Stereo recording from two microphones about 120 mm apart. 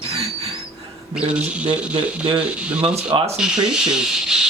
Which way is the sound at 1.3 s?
10° right (ahead or behind).